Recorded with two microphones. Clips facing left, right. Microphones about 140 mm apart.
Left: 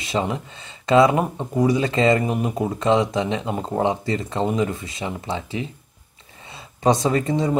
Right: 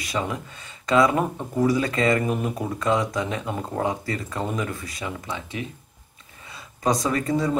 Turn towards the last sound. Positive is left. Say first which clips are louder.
# left 3 dB
turn(degrees=20)  # may be behind; listen again after turning